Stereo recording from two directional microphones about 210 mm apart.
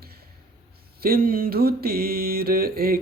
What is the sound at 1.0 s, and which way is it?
Mantra, 45° right (ahead or behind).